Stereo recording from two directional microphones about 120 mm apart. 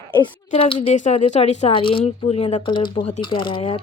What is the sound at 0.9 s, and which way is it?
Speech, 75° left (ahead or behind).